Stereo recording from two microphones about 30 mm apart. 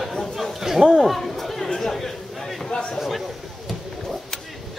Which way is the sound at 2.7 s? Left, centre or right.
Left.